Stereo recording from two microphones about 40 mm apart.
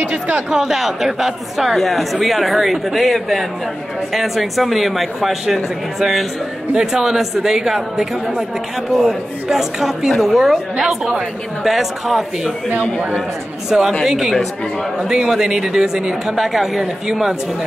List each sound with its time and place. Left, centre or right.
0.0 s speech: right
0.5 s speech: centre
13.7 s speech: centre
16.3 s speech: centre